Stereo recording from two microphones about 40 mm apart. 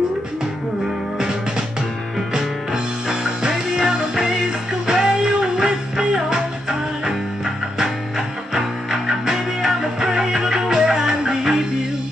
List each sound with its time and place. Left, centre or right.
2.3 s music: centre
8.5 s music: centre